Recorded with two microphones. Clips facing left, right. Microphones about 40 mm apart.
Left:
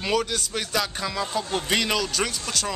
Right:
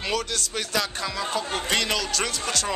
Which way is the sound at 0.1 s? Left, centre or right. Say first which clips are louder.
Left 4 dB; centre.